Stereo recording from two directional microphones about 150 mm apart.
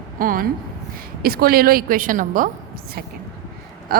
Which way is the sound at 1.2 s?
90° right.